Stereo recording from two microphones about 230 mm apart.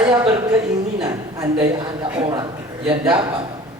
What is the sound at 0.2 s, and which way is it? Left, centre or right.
A man's voice, centre.